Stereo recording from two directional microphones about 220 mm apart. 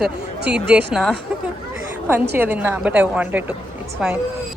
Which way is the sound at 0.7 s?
5° right (ahead or behind).